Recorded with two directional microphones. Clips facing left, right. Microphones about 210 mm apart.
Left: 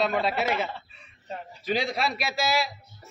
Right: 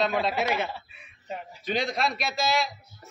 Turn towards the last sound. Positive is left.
turn(degrees=5)  # may be behind; listen again after turning